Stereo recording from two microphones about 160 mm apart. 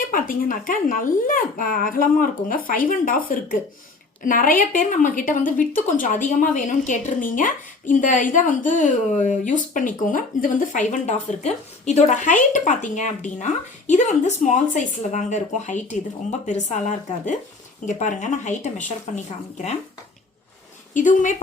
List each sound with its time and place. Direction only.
0.1 s a woman's voice: 60° left (ahead or behind)
20.9 s a woman's voice: 55° left (ahead or behind)